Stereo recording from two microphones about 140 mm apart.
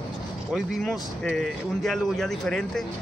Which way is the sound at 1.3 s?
Centre (ahead or behind).